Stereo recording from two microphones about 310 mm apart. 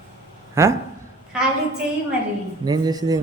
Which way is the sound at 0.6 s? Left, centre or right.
Centre.